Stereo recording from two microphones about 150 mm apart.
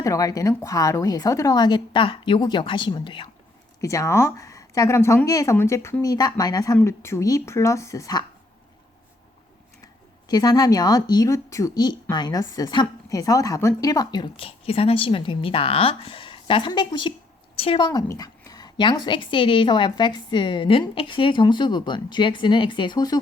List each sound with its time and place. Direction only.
0.0 s a woman's voice: 25° left (ahead or behind)
3.8 s a woman's voice: 20° left (ahead or behind)
9.8 s a woman's voice: 25° left (ahead or behind)